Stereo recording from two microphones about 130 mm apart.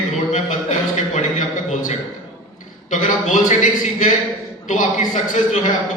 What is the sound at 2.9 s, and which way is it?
A man's voice, 80° left.